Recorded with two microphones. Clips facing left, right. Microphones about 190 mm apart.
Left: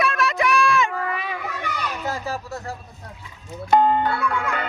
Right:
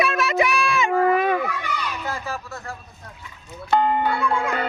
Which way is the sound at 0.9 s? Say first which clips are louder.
Right 10 dB; 45° right (ahead or behind).